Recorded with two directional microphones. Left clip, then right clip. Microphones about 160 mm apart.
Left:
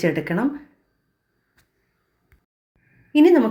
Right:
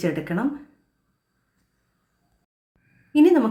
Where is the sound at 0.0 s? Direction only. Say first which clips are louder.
Left 4 dB; 20° left (ahead or behind).